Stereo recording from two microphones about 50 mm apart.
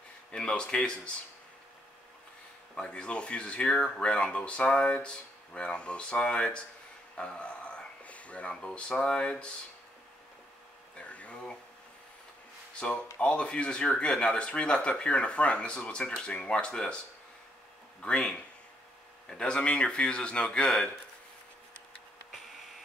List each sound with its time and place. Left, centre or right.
0.3 s speech: centre
2.7 s speech: centre
11.0 s a sound: left
12.8 s speech: left
18.0 s speech: left